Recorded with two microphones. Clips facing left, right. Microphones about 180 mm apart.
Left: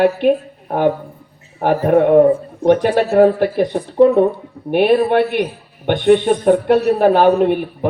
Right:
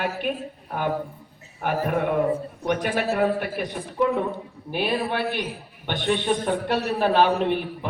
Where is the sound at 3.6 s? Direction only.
60° left (ahead or behind).